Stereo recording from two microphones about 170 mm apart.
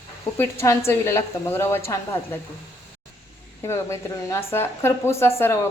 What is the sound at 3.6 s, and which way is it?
A woman's voice, 15° left (ahead or behind).